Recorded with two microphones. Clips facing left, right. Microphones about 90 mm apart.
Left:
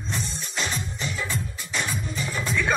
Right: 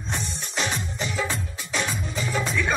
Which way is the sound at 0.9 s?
80° right.